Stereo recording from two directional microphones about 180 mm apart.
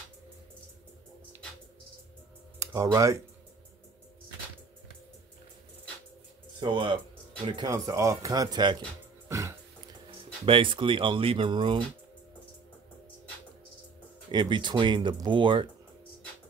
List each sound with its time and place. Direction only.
2.6 s speech: 15° right (ahead or behind)
6.6 s speech: 25° right (ahead or behind)
9.3 s bathtub: 15° right (ahead or behind)
10.4 s speech: 30° right (ahead or behind)
14.3 s speech: 25° right (ahead or behind)